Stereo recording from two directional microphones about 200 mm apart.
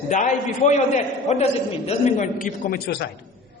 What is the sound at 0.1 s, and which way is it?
A man's voice, 40° left (ahead or behind).